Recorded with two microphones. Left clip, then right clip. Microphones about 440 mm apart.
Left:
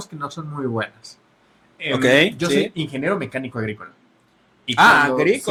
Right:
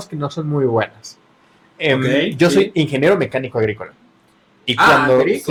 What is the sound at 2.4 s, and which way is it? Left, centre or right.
Speech, right.